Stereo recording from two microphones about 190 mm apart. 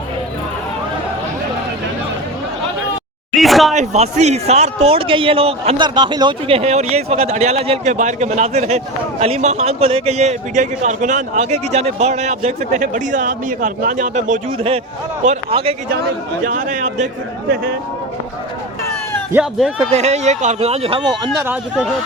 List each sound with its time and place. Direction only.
3.3 s speech: centre (ahead or behind)
3.8 s a man's voice: 35° right (ahead or behind)
16.4 s a man's voice: 45° right (ahead or behind)
19.3 s speech: 5° right (ahead or behind)
19.9 s a man's voice: 35° right (ahead or behind)
21.4 s speech: 5° right (ahead or behind)